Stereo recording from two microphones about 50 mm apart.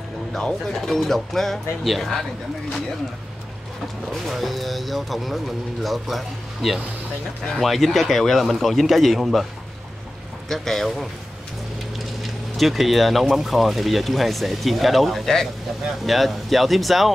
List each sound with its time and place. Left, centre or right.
0.3 s speech: centre
4.3 s speech: centre
10.5 s speech: centre
12.0 s speech: centre